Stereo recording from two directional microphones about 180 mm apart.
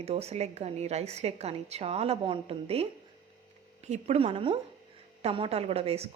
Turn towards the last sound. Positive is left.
turn(degrees=-35)  # may be behind; listen again after turning